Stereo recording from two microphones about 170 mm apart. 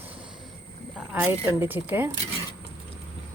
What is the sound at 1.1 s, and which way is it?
Speech, 10° right (ahead or behind).